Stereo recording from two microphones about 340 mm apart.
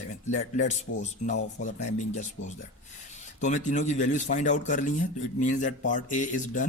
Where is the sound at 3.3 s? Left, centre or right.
Left.